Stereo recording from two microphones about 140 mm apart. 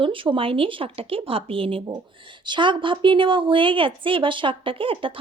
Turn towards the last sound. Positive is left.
turn(degrees=-40)  # may be behind; listen again after turning